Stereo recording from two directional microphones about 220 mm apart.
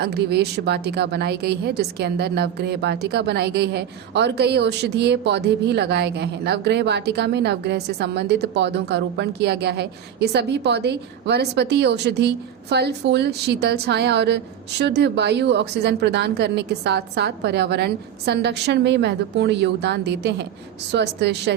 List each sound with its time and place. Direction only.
0.0 s a woman's voice: 50° right (ahead or behind)